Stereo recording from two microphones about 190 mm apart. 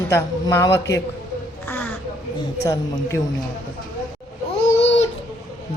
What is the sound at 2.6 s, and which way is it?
Speech, 15° left (ahead or behind).